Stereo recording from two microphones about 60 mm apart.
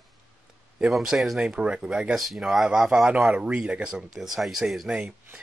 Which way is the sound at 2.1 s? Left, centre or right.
Centre.